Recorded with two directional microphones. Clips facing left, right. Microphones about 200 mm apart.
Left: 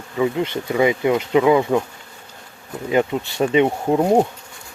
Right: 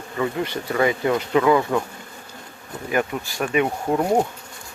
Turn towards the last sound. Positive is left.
turn(degrees=20)  # may be behind; listen again after turning